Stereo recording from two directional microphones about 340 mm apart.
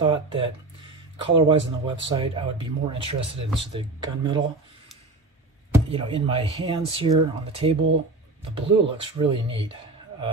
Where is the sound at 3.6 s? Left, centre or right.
Centre.